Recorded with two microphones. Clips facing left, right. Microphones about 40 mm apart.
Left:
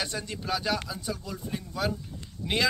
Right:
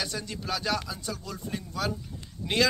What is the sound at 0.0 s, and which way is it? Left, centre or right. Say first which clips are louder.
Speech: left 1 dB; left.